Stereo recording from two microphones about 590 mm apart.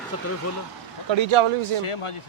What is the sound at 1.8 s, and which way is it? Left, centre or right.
Speech, left.